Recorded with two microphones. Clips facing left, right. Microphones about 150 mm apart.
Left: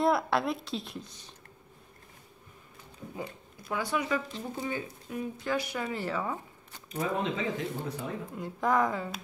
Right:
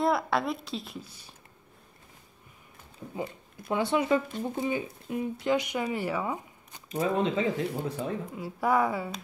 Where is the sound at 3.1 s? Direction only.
25° right (ahead or behind).